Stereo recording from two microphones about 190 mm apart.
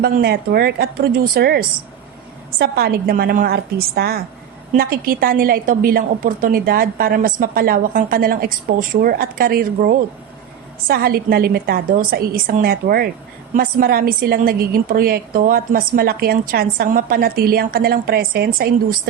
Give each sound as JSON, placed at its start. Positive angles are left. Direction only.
{"t": 0.0, "sound": "a woman's voice", "side_deg": -55}